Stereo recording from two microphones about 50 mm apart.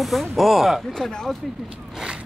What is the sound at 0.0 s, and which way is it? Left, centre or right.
Speech, centre.